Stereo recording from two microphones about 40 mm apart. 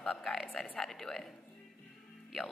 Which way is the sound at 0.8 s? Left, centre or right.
Centre.